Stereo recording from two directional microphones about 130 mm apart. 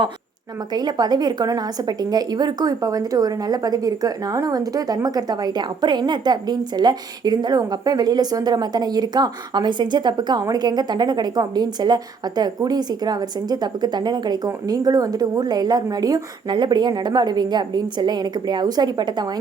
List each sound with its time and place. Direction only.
0.7 s a woman's voice: 30° right (ahead or behind)